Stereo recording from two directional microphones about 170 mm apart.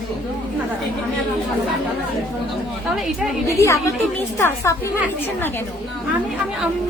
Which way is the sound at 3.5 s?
15° left (ahead or behind).